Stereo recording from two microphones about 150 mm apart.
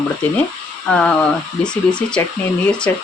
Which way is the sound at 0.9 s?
5° left (ahead or behind).